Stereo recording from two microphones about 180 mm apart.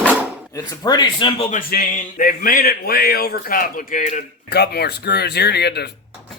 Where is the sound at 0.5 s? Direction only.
20° left (ahead or behind).